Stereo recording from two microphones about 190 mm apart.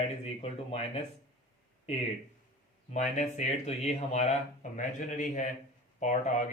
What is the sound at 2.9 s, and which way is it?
Speech, 40° left (ahead or behind).